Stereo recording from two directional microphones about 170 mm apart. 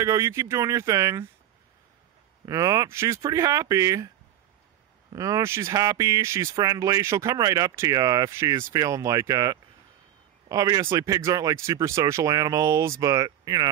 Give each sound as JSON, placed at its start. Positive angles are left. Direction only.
{"t": 0.0, "sound": "speech", "side_deg": -15}
{"t": 2.4, "sound": "speech", "side_deg": -20}
{"t": 5.1, "sound": "speech", "side_deg": -20}